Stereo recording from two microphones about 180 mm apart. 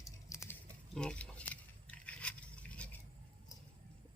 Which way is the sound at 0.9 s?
5° left (ahead or behind).